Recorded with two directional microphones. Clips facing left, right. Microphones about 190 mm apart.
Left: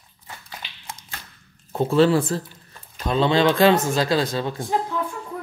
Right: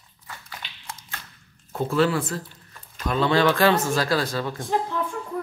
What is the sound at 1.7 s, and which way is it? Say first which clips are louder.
Speech: left 5 dB; 25° left (ahead or behind).